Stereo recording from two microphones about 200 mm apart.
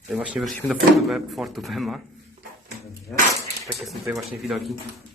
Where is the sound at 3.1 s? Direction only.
Centre (ahead or behind).